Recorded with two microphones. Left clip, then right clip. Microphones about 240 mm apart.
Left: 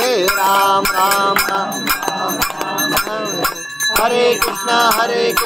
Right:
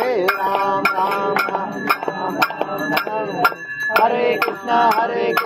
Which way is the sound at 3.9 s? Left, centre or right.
Left.